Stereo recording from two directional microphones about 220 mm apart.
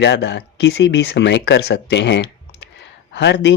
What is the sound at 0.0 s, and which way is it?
Speech, 50° left (ahead or behind).